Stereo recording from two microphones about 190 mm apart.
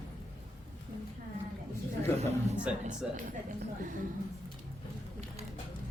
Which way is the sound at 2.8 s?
40° right (ahead or behind).